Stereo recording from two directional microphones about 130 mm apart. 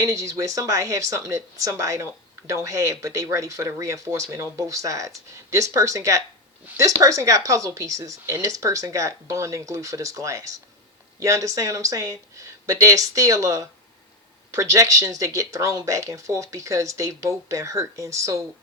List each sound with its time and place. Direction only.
0.0 s speech: 25° right (ahead or behind)
6.7 s speech: 15° right (ahead or behind)
7.0 s speech: 25° right (ahead or behind)